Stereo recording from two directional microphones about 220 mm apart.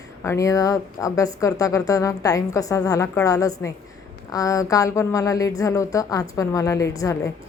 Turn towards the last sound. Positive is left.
turn(degrees=15)  # may be behind; listen again after turning